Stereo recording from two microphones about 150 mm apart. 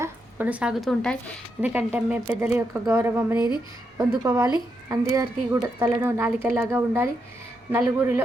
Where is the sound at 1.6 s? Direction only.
10° right (ahead or behind).